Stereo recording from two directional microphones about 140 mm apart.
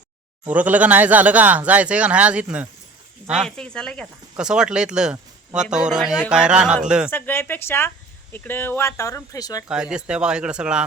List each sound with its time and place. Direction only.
0.4 s speech: 10° right (ahead or behind)
3.5 s speech: 5° left (ahead or behind)
4.4 s speech: 5° right (ahead or behind)
7.1 s speech: 15° left (ahead or behind)
9.6 s speech: 5° right (ahead or behind)